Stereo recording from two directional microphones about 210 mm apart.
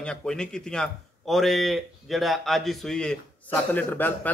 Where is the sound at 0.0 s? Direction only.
5° left (ahead or behind).